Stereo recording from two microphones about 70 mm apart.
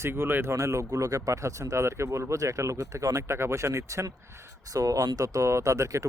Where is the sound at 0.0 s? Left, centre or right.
Right.